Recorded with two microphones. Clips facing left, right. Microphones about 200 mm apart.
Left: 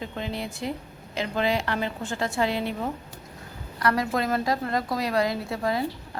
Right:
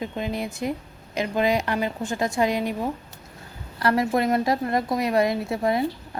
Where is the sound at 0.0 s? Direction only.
15° right (ahead or behind).